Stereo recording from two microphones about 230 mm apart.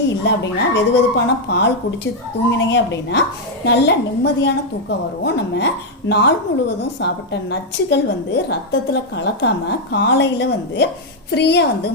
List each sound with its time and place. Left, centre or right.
0.3 s a woman's voice: left